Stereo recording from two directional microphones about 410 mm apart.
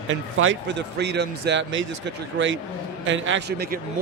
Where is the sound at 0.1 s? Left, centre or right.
Right.